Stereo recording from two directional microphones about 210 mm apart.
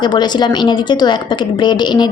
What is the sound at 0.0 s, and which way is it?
A woman's voice, 20° left (ahead or behind).